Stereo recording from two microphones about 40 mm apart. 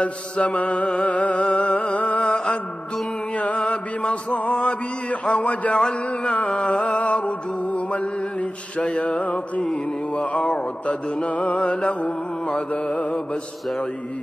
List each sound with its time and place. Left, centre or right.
0.0 s mantra: left
1.8 s music: left
2.3 s music: left
3.3 s mantra: left
3.6 s mantra: left
6.2 s music: left
9.7 s mantra: left